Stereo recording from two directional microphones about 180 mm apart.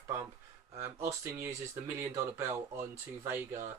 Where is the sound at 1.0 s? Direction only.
15° right (ahead or behind).